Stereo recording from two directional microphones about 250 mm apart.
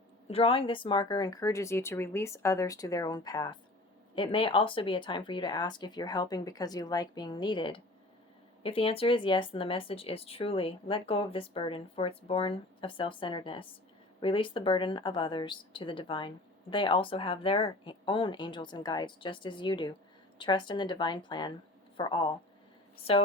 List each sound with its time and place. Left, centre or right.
0.3 s speech: left